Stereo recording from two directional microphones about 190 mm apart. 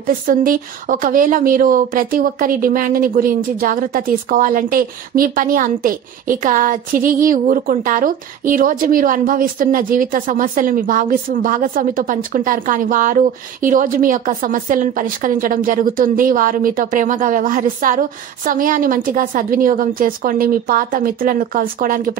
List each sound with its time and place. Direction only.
0.0 s speech: 50° right (ahead or behind)